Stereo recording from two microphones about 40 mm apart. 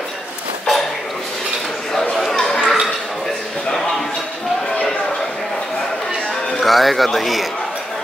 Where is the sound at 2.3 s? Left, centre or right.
Centre.